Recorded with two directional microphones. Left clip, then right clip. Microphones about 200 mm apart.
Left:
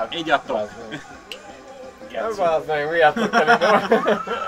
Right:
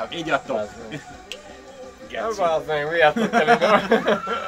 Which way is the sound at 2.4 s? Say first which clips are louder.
Left 2 dB; 15° left (ahead or behind).